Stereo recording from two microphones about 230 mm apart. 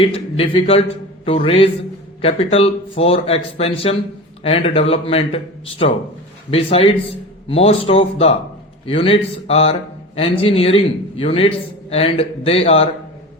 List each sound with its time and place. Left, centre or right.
0.0 s a man's voice: left